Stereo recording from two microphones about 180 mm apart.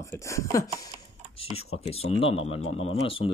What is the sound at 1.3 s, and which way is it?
Speech, 35° left (ahead or behind).